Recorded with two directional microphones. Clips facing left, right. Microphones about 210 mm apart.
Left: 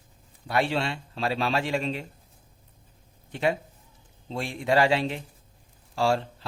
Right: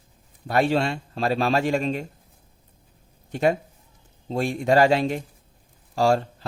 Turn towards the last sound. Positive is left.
turn(degrees=-45)  # may be behind; listen again after turning